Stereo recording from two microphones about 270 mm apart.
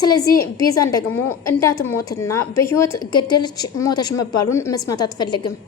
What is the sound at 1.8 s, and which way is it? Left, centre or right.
A woman's voice, centre.